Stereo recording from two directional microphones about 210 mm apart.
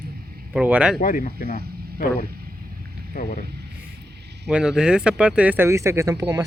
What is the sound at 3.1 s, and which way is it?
Speech, 40° left (ahead or behind).